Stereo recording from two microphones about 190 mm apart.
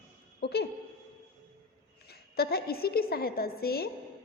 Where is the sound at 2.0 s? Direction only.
55° left (ahead or behind).